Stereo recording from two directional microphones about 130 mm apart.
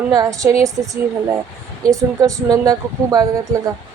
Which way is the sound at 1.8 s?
25° right (ahead or behind).